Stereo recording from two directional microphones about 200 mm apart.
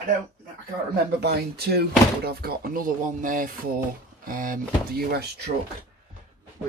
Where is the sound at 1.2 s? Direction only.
55° right (ahead or behind).